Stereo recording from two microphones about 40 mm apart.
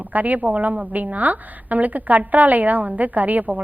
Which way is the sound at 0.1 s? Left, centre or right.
Right.